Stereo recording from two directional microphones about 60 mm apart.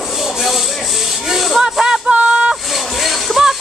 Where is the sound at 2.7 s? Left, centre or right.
Centre.